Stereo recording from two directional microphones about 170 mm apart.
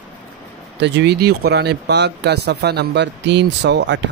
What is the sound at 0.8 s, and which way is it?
Speech, 85° right.